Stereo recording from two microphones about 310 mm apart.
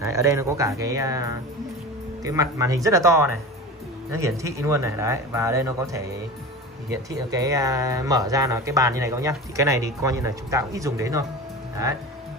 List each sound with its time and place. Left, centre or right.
0.1 s speech: centre